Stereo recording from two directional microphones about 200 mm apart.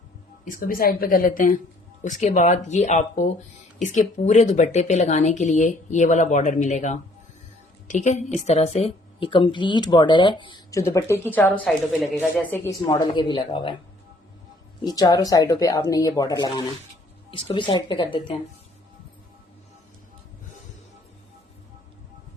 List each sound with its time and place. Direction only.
0.5 s a woman's voice: 45° left (ahead or behind); by 13.7 s 25° left (ahead or behind)
14.8 s speech: 20° left (ahead or behind)